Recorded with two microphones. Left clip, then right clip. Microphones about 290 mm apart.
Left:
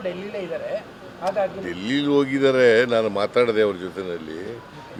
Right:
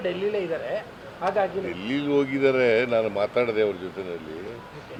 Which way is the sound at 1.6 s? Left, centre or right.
Left.